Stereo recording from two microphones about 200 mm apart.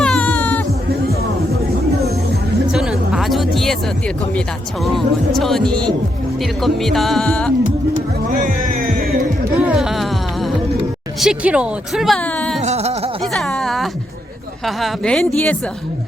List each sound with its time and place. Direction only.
0.0 s baby cry: 5° left (ahead or behind)
2.7 s speech: centre (ahead or behind)
7.6 s music: 40° right (ahead or behind)
9.6 s music: 5° right (ahead or behind)
11.2 s speech: 5° right (ahead or behind)
12.6 s a sound: 30° right (ahead or behind)
13.3 s a sound: centre (ahead or behind)
14.6 s speech: centre (ahead or behind)